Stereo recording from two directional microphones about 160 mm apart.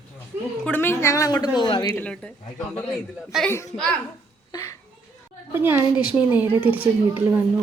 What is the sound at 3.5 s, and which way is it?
Speech, 15° left (ahead or behind).